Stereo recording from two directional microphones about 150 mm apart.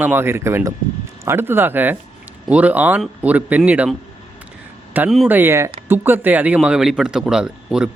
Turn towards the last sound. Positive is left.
turn(degrees=-5)  # may be behind; listen again after turning